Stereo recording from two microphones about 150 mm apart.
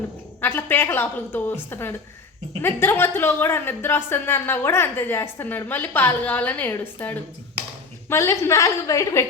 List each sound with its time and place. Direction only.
0.4 s a woman's voice: 15° left (ahead or behind)